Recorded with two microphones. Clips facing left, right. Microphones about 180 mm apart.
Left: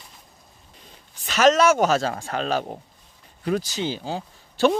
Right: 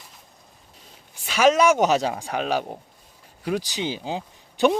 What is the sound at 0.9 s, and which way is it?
Speech, 10° right (ahead or behind).